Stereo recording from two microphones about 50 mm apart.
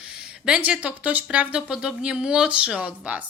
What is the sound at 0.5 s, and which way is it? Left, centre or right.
A woman's voice, right.